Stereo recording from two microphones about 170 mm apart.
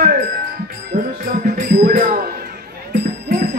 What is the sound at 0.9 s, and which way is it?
Music, 45° right (ahead or behind).